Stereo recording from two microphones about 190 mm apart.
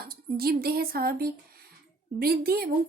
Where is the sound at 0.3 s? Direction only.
55° right (ahead or behind).